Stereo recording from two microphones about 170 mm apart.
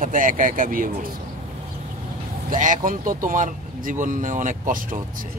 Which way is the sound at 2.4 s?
50° right (ahead or behind).